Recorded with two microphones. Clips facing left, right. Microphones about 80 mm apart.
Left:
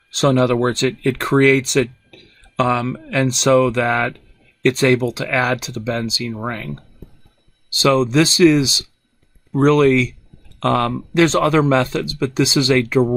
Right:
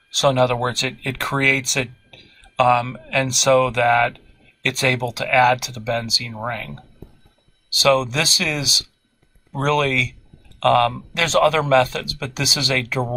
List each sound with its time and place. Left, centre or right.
0.1 s speech: left
7.7 s speech: left